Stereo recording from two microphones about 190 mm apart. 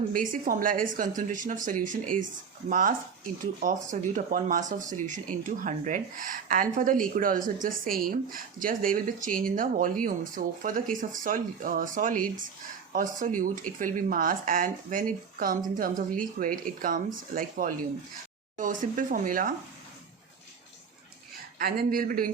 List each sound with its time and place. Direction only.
0.1 s speech: 45° right (ahead or behind)
21.6 s speech: 50° right (ahead or behind)